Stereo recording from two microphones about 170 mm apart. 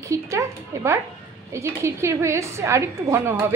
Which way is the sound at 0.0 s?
20° right (ahead or behind).